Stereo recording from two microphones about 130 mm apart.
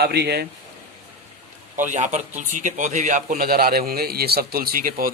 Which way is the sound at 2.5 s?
75° right (ahead or behind).